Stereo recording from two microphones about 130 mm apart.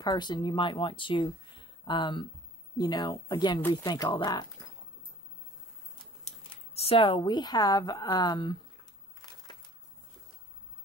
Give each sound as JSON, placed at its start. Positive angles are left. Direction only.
{"t": 0.0, "sound": "speech", "side_deg": 35}
{"t": 6.5, "sound": "speech", "side_deg": 50}